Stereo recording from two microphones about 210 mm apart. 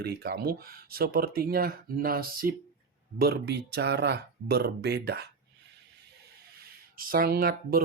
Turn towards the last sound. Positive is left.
turn(degrees=-45)  # may be behind; listen again after turning